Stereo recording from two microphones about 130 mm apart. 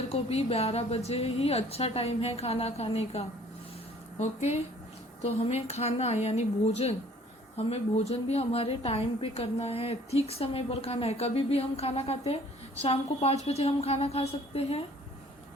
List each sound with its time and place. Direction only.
0.1 s a woman's voice: 55° left (ahead or behind)